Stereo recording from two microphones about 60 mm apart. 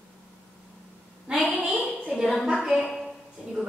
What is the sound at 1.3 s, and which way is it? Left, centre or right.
Speech, centre.